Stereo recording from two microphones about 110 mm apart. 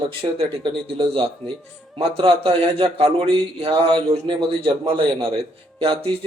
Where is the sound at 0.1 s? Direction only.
60° right (ahead or behind).